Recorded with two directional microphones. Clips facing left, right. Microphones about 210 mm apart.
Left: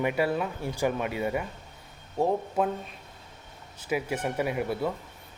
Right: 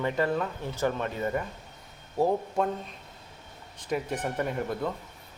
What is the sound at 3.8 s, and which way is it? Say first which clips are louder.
Speech: left 1 dB; 5° left (ahead or behind).